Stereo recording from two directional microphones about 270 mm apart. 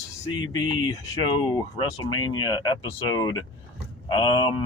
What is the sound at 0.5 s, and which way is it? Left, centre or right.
Speech, centre.